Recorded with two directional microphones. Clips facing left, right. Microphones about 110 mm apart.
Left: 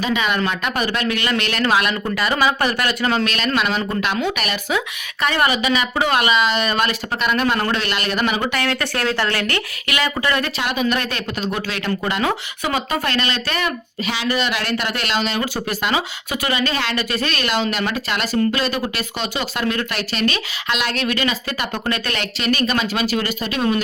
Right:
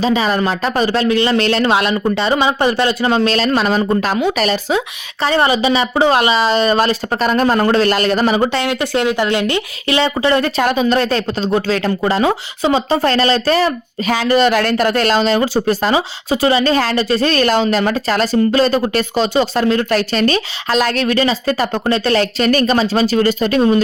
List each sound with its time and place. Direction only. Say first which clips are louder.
0.0 s speech: right 5 dB; 35° right (ahead or behind)
8.6 s speech: right 5 dB; 20° right (ahead or behind); by 23.6 s 40° right (ahead or behind)